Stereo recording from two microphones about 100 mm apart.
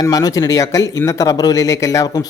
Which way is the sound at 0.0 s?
40° left (ahead or behind).